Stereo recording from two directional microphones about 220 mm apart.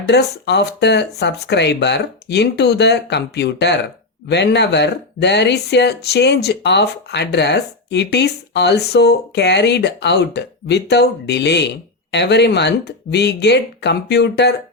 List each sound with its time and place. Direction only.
0.1 s speech: 50° left (ahead or behind)